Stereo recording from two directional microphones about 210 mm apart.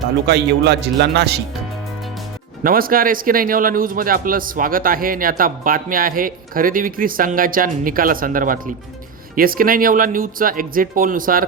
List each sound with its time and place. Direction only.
0.3 s a man's voice: 55° right (ahead or behind)
2.6 s a man's voice: 45° right (ahead or behind)